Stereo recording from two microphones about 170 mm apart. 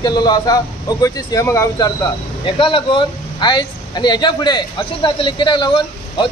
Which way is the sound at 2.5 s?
30° left (ahead or behind).